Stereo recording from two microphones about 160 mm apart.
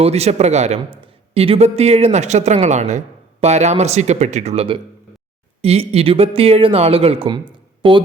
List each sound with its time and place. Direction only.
0.0 s a man's voice: 40° right (ahead or behind)